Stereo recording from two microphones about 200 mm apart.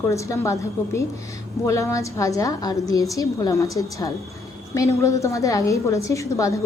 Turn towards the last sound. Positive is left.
turn(degrees=15)  # may be behind; listen again after turning